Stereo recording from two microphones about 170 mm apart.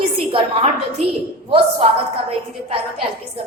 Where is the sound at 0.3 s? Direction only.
35° right (ahead or behind).